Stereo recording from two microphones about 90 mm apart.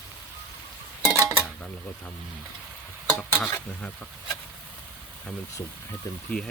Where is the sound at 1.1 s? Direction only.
35° right (ahead or behind).